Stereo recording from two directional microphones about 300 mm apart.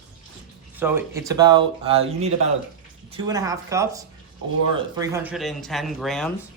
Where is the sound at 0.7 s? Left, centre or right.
Centre.